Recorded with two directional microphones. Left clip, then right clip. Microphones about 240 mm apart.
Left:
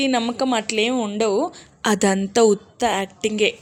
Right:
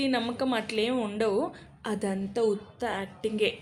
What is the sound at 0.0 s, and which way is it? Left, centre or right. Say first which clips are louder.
A woman's voice: left 8 dB; left.